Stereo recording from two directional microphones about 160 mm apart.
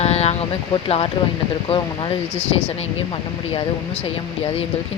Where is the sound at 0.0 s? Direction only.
40° left (ahead or behind).